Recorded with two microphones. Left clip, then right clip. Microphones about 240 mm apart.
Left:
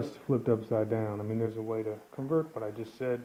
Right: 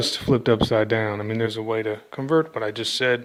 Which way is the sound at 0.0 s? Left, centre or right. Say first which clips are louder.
Right 10 dB; right.